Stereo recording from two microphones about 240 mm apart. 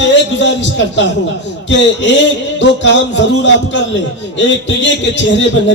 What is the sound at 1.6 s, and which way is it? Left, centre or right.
A man's voice, left.